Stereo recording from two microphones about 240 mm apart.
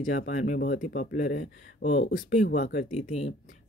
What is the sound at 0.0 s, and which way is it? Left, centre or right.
Speech, left.